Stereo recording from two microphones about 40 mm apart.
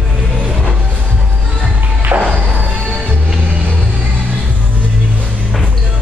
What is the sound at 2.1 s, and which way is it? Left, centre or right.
Music, right.